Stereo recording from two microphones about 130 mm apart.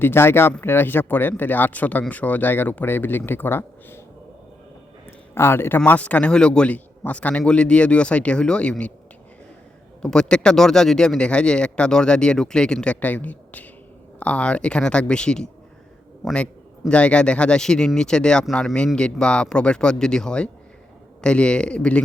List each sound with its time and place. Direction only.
0.0 s speech: 15° left (ahead or behind)
5.3 s speech: 20° left (ahead or behind)
10.0 s speech: 5° left (ahead or behind)